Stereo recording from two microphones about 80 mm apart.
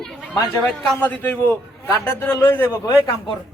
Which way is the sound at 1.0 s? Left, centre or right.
Left.